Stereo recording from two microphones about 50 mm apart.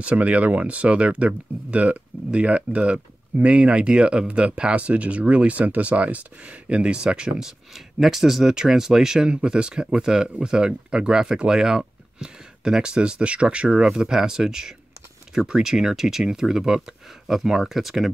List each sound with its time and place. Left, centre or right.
0.0 s speech: right; by 18.1 s centre